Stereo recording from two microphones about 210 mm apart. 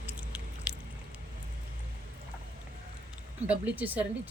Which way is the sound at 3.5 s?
10° right (ahead or behind).